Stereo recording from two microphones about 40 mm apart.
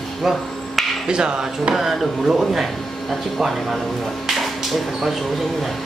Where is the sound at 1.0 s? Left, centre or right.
Right.